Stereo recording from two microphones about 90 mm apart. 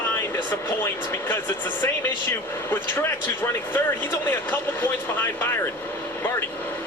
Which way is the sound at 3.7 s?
20° left (ahead or behind).